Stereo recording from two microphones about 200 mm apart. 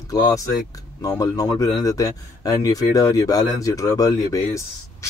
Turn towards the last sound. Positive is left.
turn(degrees=15)  # may be behind; listen again after turning